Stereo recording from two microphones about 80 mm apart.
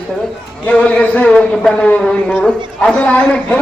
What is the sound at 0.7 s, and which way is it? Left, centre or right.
A man's voice, centre.